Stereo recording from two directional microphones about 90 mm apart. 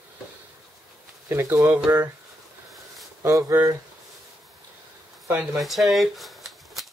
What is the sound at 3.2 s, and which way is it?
Speech, 35° right (ahead or behind).